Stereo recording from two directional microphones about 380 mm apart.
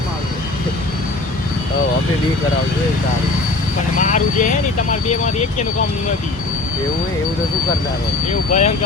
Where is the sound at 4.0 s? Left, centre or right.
Centre.